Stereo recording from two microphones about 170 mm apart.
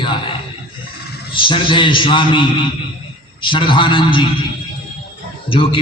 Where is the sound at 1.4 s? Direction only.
30° left (ahead or behind).